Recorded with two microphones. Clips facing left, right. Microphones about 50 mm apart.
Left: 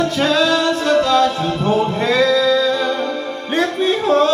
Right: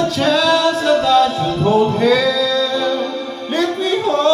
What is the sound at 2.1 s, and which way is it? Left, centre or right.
Music, centre.